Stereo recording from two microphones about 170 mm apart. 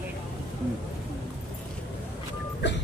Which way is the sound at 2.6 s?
90° left.